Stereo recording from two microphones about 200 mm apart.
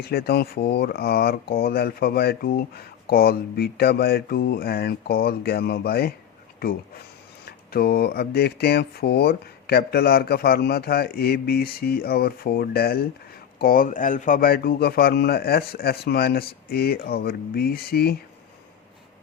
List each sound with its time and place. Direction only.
0.0 s speech: 50° left (ahead or behind)